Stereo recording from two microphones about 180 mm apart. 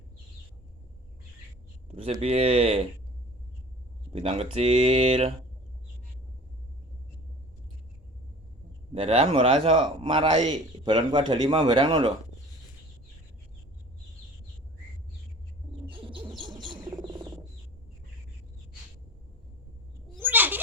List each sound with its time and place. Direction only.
1.9 s a man's voice: 35° right (ahead or behind)
4.1 s a man's voice: 35° right (ahead or behind)
8.9 s a man's voice: 35° right (ahead or behind)
15.9 s bird: 30° right (ahead or behind)
20.2 s a sound: 10° right (ahead or behind)